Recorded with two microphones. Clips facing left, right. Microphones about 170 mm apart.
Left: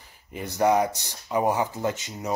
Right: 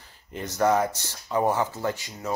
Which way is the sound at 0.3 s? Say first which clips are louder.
Left 1 dB; 10° left (ahead or behind).